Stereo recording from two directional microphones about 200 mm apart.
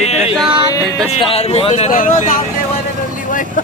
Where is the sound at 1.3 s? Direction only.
30° left (ahead or behind).